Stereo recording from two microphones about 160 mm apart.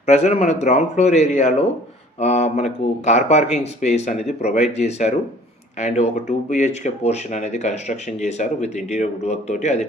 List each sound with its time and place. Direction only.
0.0 s speech: 45° left (ahead or behind)